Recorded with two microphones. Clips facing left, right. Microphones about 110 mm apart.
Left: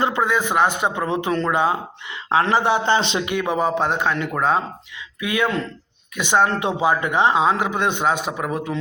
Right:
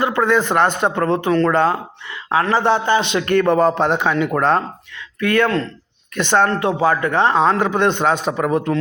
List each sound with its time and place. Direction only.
0.2 s a man's voice: 5° left (ahead or behind)
2.1 s speech: 25° left (ahead or behind)
2.6 s a man's voice: 15° left (ahead or behind)
2.8 s speech: 25° left (ahead or behind)
3.2 s a man's voice: 10° left (ahead or behind)
6.5 s a man's voice: 20° left (ahead or behind); by 8.7 s centre (ahead or behind)